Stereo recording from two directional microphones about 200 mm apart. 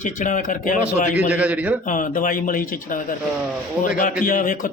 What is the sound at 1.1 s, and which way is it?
Speech, 5° right (ahead or behind).